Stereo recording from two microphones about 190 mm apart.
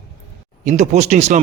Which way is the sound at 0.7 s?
35° right (ahead or behind).